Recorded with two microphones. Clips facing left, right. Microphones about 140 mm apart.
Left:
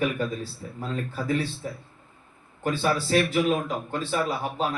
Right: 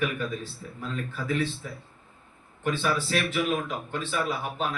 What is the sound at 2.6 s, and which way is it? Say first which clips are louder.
Speech: left 2 dB; 35° left (ahead or behind).